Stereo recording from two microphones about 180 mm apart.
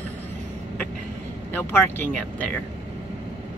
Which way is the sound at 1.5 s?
10° left (ahead or behind).